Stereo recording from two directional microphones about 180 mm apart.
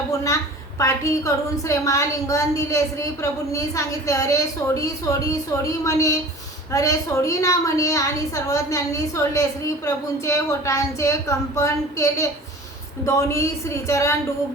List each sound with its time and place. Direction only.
0.8 s a woman's voice: 15° left (ahead or behind)